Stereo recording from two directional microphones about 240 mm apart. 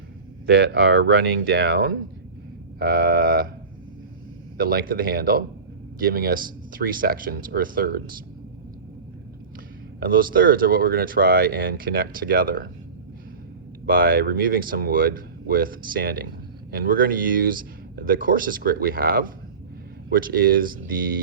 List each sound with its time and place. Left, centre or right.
0.4 s speech: right
4.5 s speech: right
10.1 s speech: right
13.8 s speech: right